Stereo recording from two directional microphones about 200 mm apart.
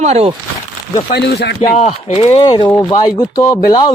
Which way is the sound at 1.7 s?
35° left (ahead or behind).